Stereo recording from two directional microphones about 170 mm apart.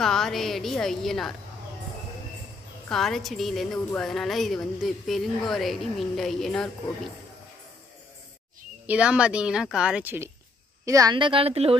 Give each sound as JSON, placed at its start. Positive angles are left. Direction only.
{"t": 0.0, "sound": "a woman's voice", "side_deg": 5}
{"t": 2.9, "sound": "a woman's voice", "side_deg": 0}
{"t": 8.8, "sound": "a woman's voice", "side_deg": -5}